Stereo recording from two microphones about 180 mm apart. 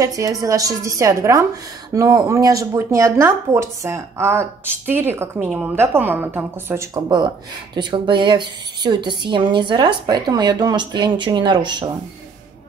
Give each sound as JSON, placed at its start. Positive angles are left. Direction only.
{"t": 0.0, "sound": "speech", "side_deg": -20}